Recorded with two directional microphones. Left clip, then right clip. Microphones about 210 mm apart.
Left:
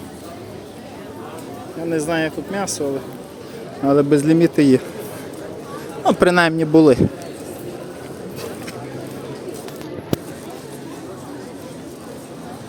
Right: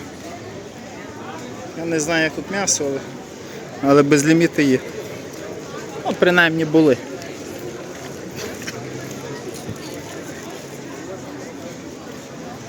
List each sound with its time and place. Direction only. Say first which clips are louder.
1.9 s speech: right 1 dB; 10° left (ahead or behind)
3.8 s a man's voice: right 1 dB; 5° left (ahead or behind)
4.4 s speech: left 2 dB; 20° left (ahead or behind)
6.1 s a man's voice: left 1 dB; 35° left (ahead or behind)